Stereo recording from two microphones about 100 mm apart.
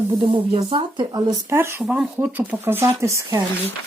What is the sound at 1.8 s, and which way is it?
Speech, 5° right (ahead or behind).